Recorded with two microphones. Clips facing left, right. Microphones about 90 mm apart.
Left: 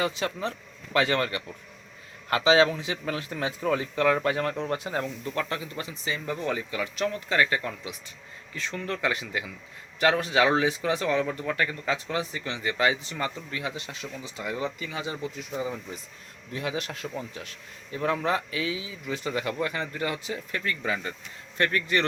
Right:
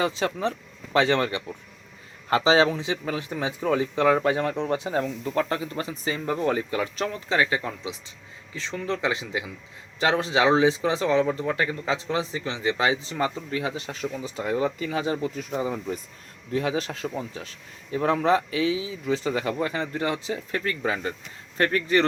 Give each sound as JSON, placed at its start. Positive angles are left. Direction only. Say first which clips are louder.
{"t": 0.0, "sound": "speech", "louder": "right 3 dB", "side_deg": -30}